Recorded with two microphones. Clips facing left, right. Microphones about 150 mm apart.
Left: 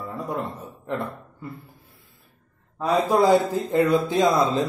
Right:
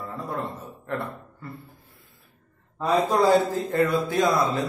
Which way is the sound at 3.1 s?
15° left (ahead or behind).